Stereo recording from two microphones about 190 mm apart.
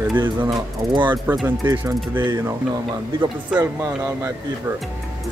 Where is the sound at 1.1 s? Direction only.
10° right (ahead or behind).